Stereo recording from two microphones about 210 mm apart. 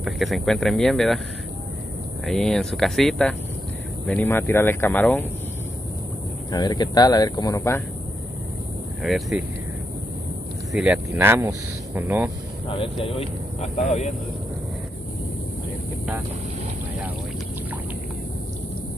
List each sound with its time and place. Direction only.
0.0 s speech: centre (ahead or behind)
2.2 s speech: centre (ahead or behind)
6.5 s speech: 20° left (ahead or behind)
9.0 s speech: centre (ahead or behind)
10.7 s speech: 5° right (ahead or behind)
12.6 s speech: 25° left (ahead or behind)